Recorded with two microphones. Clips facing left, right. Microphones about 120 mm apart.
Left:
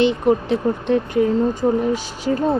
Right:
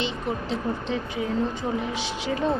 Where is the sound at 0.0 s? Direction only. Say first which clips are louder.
Left 12 dB; 55° left (ahead or behind).